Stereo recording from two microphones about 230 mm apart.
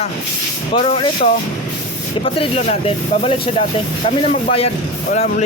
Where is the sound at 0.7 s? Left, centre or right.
Left.